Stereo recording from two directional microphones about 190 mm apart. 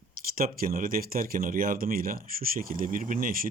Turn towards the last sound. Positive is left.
turn(degrees=-45)  # may be behind; listen again after turning